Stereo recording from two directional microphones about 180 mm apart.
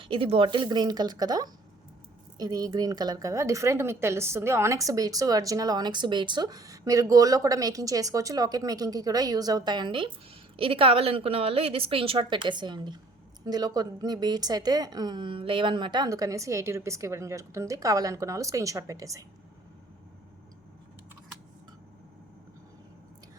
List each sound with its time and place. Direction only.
0.0 s a woman's voice: 30° right (ahead or behind)